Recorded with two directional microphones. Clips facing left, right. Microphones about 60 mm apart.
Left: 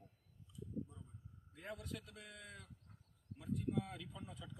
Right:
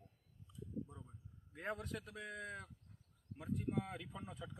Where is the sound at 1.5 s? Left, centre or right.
Right.